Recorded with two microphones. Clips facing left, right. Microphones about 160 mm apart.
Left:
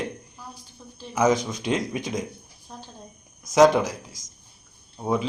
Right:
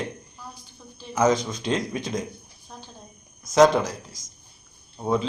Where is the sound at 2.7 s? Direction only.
5° left (ahead or behind).